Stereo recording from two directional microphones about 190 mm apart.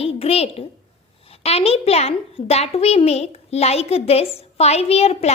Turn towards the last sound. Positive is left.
turn(degrees=35)  # may be behind; listen again after turning